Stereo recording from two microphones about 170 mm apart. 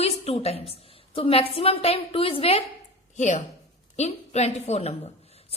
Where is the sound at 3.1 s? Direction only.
45° left (ahead or behind).